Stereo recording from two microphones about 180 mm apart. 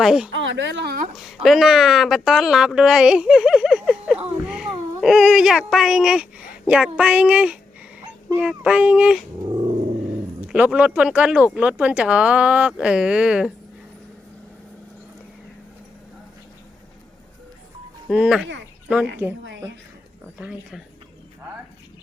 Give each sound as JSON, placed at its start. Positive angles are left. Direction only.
{"t": 0.0, "sound": "a woman's voice", "side_deg": -5}
{"t": 0.3, "sound": "a woman's voice", "side_deg": -90}
{"t": 1.1, "sound": "a woman's voice", "side_deg": 0}
{"t": 10.5, "sound": "a woman's voice", "side_deg": -5}
{"t": 18.1, "sound": "a woman's voice", "side_deg": -5}
{"t": 20.4, "sound": "a woman's voice", "side_deg": -5}